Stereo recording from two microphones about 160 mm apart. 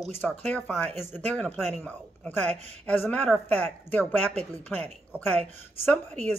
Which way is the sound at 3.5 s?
10° left (ahead or behind).